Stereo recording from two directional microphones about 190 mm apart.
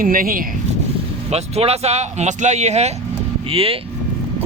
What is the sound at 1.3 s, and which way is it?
Speech, 35° right (ahead or behind).